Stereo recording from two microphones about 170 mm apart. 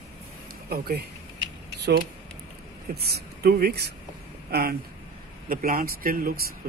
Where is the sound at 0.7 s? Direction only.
65° right (ahead or behind).